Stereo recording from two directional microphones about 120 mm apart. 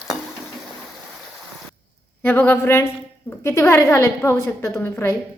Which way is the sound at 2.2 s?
15° left (ahead or behind).